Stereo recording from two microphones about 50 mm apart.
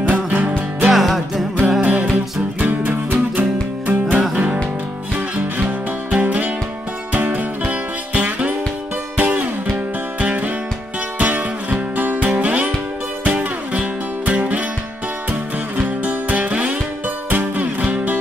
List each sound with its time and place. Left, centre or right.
0.1 s music: right
0.8 s music: centre
1.8 s music: right
5.6 s music: right
15.8 s music: right